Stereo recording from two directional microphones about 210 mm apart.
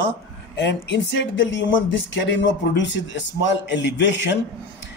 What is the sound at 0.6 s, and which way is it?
Speech, 55° left (ahead or behind).